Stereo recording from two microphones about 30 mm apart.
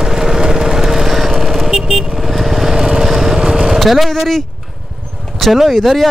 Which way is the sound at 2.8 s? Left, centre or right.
Centre.